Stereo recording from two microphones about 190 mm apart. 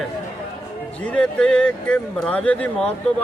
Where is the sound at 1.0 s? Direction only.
5° left (ahead or behind).